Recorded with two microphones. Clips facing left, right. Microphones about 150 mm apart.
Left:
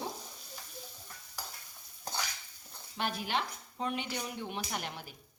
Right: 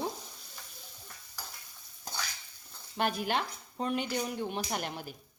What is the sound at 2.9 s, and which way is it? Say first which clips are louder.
Speech: right 4 dB; 50° right (ahead or behind).